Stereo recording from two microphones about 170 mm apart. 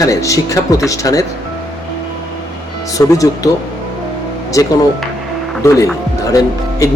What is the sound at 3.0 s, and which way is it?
Speech, 20° left (ahead or behind).